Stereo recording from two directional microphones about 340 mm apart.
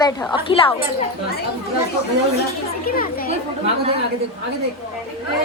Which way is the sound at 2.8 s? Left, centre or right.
Left.